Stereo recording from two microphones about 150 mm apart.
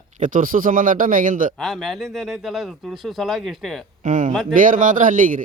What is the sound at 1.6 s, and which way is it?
Speech, centre (ahead or behind).